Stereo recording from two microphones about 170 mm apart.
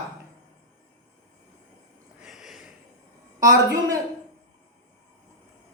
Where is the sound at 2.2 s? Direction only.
Centre (ahead or behind).